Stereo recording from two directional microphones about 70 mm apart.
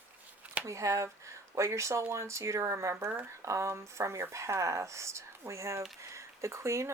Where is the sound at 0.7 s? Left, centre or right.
Right.